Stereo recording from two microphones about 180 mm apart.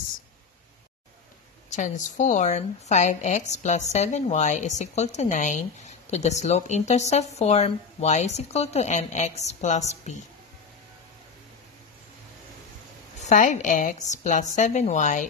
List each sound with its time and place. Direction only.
1.7 s speech: 45° left (ahead or behind)
13.2 s speech: 45° left (ahead or behind)